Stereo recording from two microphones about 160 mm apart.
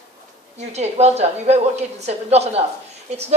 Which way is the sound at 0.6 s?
45° right (ahead or behind).